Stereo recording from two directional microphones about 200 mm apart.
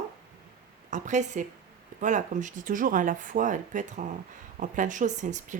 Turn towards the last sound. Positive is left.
turn(degrees=-35)  # may be behind; listen again after turning